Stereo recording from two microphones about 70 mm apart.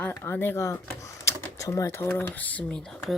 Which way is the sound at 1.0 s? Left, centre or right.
Left.